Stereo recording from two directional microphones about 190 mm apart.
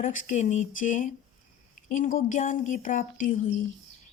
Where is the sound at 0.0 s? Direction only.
45° left (ahead or behind).